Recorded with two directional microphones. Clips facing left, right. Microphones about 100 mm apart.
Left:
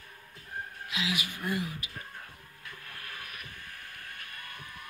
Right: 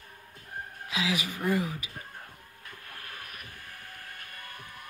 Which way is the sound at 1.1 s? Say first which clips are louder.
Right 7 dB; 40° right (ahead or behind).